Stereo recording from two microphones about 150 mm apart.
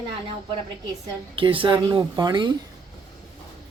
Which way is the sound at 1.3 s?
35° right (ahead or behind).